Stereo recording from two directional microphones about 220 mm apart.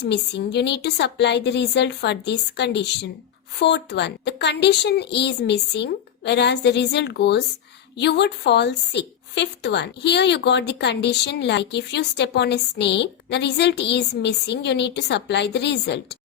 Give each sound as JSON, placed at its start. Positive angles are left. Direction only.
{"t": 0.0, "sound": "a woman's voice", "side_deg": 50}